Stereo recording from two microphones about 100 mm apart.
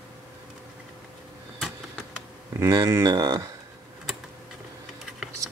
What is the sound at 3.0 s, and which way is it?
Speech, 40° right (ahead or behind).